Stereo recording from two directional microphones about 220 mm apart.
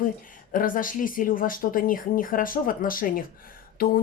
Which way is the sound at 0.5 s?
40° left (ahead or behind).